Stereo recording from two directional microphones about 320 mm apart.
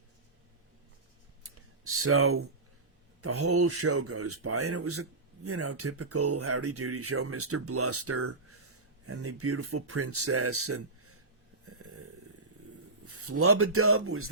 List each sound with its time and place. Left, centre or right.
1.5 s clicking: right
3.2 s speech: right
11.6 s snoring: right
13.1 s speech: right